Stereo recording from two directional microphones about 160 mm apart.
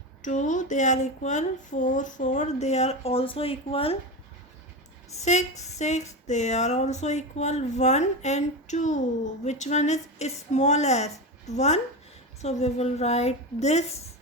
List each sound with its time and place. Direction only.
0.2 s speech: 50° left (ahead or behind)
5.1 s speech: 45° left (ahead or behind)